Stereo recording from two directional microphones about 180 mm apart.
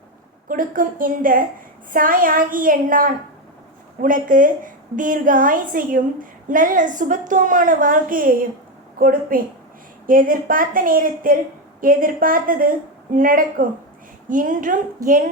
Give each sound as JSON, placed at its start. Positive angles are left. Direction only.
{"t": 0.4, "sound": "a woman's voice", "side_deg": -50}